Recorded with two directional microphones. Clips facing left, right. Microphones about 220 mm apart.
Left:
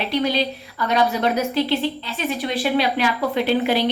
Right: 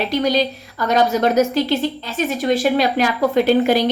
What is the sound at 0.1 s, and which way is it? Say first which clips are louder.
A woman's voice: even; 45° right (ahead or behind).